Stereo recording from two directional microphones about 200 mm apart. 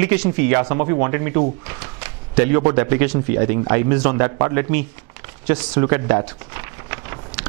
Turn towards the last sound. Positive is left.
turn(degrees=-15)  # may be behind; listen again after turning